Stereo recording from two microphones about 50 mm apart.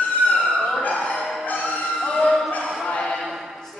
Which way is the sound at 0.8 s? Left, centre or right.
Left.